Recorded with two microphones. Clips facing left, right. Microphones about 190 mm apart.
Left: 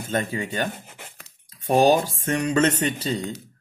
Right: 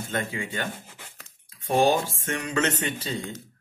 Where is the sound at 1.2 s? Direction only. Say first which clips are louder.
Left 7 dB; 40° left (ahead or behind).